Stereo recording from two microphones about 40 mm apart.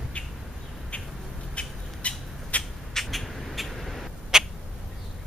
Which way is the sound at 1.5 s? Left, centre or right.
Left.